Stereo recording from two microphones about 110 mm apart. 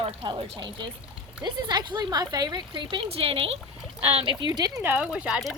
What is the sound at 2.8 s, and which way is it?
Speech, 50° right (ahead or behind).